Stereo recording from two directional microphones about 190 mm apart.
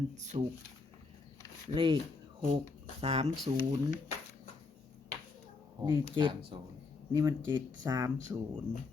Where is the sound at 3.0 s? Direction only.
30° right (ahead or behind).